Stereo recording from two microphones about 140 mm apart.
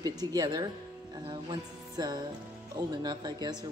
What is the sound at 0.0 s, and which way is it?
Speech, 25° right (ahead or behind).